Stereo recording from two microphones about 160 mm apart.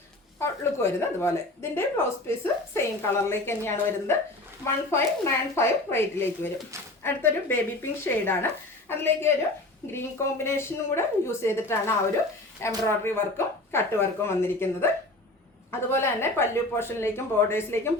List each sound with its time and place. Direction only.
0.3 s a woman's voice: 15° left (ahead or behind)
15.9 s a woman's voice: 15° left (ahead or behind)